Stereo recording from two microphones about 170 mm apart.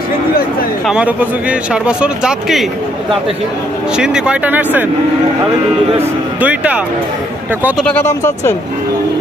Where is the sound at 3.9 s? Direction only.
5° right (ahead or behind).